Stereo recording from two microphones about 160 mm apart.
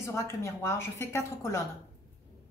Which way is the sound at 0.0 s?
15° left (ahead or behind).